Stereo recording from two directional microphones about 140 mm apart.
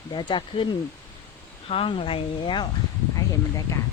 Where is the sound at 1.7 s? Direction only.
40° left (ahead or behind).